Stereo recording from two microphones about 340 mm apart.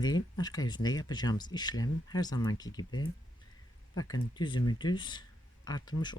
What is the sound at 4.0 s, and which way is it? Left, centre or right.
Speech, centre.